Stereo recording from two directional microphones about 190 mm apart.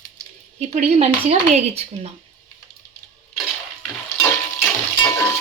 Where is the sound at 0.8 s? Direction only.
35° right (ahead or behind).